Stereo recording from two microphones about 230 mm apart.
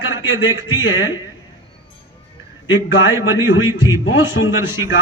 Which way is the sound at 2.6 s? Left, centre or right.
Left.